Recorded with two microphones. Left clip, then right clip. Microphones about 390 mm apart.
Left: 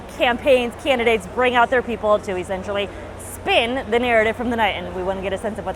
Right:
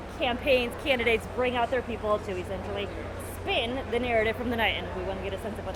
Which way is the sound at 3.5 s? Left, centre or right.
Left.